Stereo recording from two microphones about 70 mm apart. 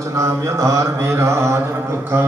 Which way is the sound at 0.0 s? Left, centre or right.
Right.